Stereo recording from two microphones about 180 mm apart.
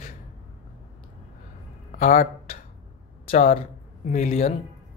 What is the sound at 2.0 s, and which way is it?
Speech, 50° left (ahead or behind).